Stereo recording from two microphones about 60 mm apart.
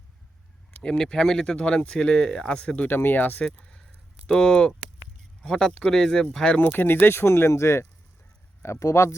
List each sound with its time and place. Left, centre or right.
0.8 s speech: centre
2.9 s speech: left
3.4 s speech: centre
6.6 s speech: left